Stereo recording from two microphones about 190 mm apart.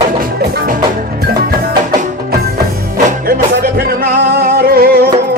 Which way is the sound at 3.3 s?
50° right (ahead or behind).